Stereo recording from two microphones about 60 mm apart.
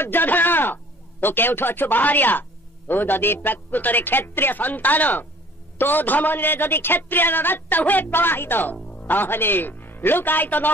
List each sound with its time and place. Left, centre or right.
0.0 s a man's voice: left